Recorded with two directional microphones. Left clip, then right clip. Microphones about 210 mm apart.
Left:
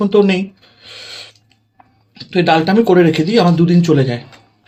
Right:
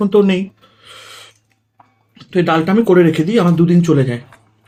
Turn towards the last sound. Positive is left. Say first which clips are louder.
# left 1 dB
turn(degrees=-5)  # may be behind; listen again after turning